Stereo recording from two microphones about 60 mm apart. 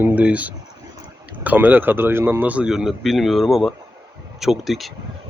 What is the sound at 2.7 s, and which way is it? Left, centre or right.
A man's voice, centre.